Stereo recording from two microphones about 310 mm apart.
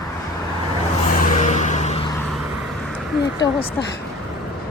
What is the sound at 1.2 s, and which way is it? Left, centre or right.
Vehicle, left.